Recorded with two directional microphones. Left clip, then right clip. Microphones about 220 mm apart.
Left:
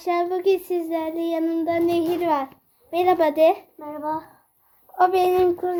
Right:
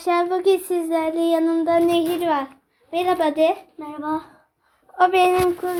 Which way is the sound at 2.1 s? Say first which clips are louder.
Right 1 dB; 25° left (ahead or behind).